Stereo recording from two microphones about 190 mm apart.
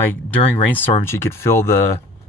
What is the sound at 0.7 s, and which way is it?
Speech, 10° left (ahead or behind).